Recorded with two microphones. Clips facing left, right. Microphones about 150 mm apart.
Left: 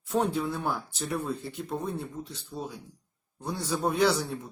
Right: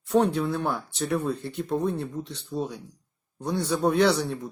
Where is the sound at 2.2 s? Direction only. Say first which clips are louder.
Right 3 dB; 70° right (ahead or behind).